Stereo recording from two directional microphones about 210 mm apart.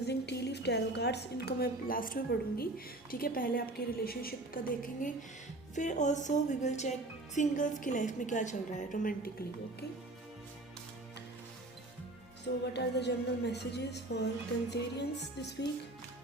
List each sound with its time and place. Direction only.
0.0 s a woman's voice: 55° left (ahead or behind)
12.6 s a woman's voice: 55° left (ahead or behind)